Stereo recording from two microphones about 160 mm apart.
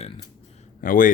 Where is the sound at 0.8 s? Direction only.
60° left (ahead or behind).